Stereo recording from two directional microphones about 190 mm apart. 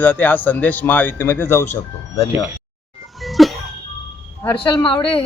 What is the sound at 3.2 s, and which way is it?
Cough, centre (ahead or behind).